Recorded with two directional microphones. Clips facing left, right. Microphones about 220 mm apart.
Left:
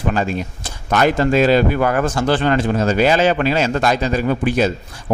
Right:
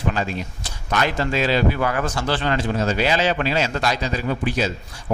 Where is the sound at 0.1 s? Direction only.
50° left (ahead or behind).